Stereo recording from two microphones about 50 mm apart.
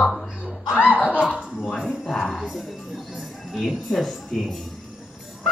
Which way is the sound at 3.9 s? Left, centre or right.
Centre.